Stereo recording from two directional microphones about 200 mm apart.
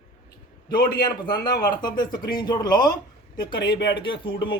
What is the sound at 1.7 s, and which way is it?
Speech, 20° left (ahead or behind).